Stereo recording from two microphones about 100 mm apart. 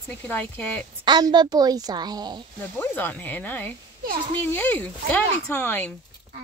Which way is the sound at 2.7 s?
20° left (ahead or behind).